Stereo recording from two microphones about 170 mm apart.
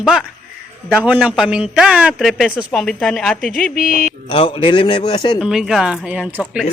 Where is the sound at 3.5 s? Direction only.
55° left (ahead or behind).